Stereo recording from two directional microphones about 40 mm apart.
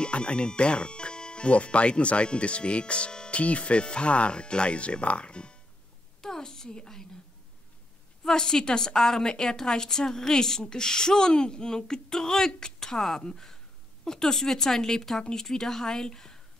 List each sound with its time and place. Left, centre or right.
0.0 s speech: left
6.2 s a woman's voice: centre
8.3 s a woman's voice: centre